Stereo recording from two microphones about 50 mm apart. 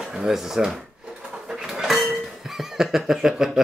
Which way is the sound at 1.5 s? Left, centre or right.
Centre.